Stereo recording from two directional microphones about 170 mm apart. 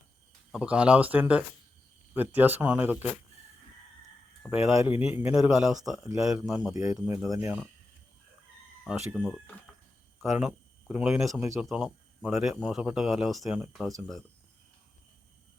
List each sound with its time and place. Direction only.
0.5 s speech: 5° right (ahead or behind)
4.4 s speech: centre (ahead or behind)
6.7 s speech: 20° right (ahead or behind)
7.0 s speech: 5° right (ahead or behind)
8.8 s speech: 5° right (ahead or behind)